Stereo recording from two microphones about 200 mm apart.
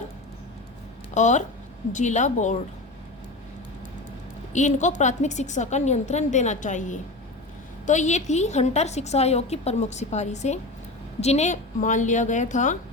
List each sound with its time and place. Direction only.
1.1 s a woman's voice: 35° left (ahead or behind)
4.5 s a woman's voice: 35° left (ahead or behind)